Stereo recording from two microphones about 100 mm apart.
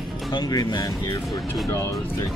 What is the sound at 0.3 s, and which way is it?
Speech, 40° left (ahead or behind).